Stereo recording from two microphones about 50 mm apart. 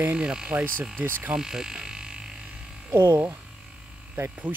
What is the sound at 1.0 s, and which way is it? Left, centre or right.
Speech, right.